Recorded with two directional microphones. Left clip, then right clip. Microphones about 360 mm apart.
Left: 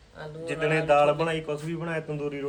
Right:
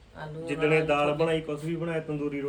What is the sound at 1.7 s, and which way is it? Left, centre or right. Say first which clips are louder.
Speech: even; centre.